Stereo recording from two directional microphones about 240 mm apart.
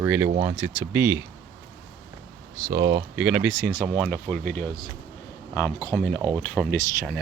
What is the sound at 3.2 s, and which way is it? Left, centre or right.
Speech, centre.